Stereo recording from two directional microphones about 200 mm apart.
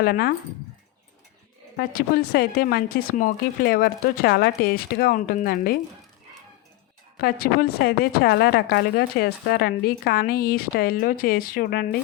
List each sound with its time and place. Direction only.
0.0 s a woman's voice: 50° left (ahead or behind)
1.7 s a woman's voice: 45° left (ahead or behind)
7.2 s a woman's voice: 45° left (ahead or behind)